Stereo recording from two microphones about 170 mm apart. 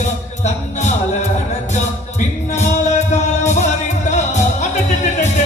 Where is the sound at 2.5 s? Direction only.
45° left (ahead or behind).